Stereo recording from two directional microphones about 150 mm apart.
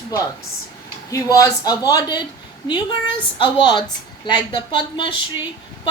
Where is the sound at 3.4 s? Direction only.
30° left (ahead or behind).